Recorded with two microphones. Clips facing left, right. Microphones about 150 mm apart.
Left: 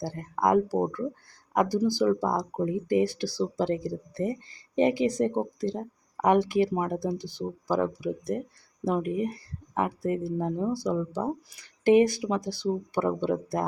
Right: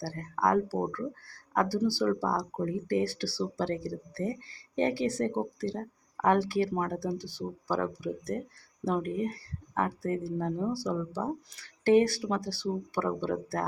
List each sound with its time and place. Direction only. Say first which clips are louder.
0.0 s speech: left 3 dB; 15° left (ahead or behind)